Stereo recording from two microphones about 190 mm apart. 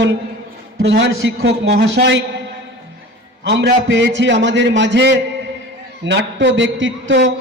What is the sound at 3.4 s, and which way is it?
A man's voice, 65° right (ahead or behind).